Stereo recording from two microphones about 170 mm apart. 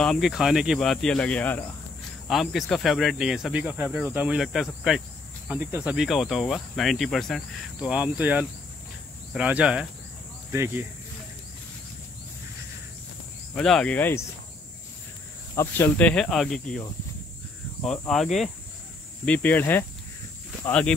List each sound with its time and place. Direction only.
0.0 s speech: centre (ahead or behind)
13.6 s speech: 5° left (ahead or behind)
15.5 s speech: 15° left (ahead or behind)
17.8 s speech: 5° left (ahead or behind)